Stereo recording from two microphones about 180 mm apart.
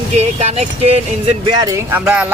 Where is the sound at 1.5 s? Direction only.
20° right (ahead or behind).